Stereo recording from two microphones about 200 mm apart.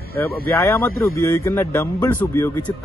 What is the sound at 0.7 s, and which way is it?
Speech, 15° left (ahead or behind).